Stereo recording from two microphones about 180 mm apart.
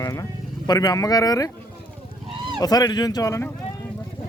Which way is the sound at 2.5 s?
20° left (ahead or behind).